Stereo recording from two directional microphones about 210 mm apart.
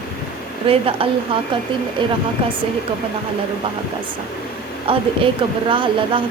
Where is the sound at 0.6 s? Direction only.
25° right (ahead or behind).